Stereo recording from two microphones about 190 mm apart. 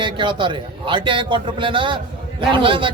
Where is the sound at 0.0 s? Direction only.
25° right (ahead or behind).